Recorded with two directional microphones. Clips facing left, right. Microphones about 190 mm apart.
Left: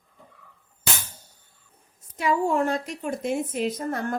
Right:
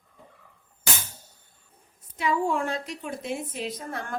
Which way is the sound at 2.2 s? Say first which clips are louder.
Left 3 dB; 40° left (ahead or behind).